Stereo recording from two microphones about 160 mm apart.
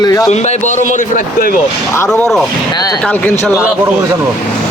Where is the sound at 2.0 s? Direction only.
5° left (ahead or behind).